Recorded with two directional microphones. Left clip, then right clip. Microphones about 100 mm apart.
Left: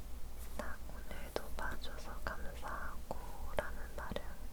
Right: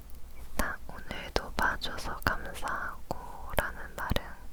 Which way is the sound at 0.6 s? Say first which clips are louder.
Right 12 dB; 40° right (ahead or behind).